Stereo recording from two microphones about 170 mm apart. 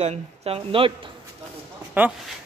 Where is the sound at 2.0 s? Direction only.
10° right (ahead or behind).